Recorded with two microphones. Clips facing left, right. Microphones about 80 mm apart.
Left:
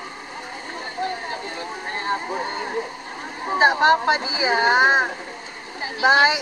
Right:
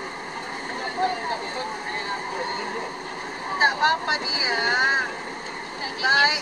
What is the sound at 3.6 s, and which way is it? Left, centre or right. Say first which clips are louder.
Speech: left 5 dB; left.